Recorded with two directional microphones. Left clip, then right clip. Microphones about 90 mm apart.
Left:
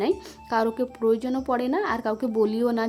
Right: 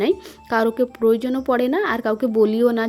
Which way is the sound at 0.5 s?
40° right (ahead or behind).